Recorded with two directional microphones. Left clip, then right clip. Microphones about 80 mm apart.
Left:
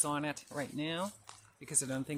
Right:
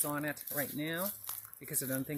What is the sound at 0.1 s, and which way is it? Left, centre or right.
Speech, left.